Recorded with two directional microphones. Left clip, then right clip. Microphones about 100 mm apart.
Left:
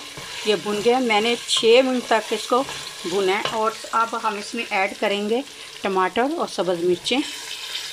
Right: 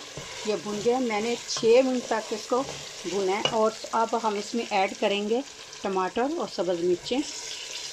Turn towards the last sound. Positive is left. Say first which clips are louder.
# left 5 dB
turn(degrees=0)  # may be behind; listen again after turning